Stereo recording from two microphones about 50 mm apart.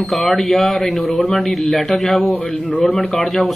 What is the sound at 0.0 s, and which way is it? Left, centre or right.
Speech, centre.